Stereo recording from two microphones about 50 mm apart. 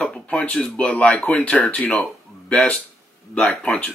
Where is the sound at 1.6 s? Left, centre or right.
Left.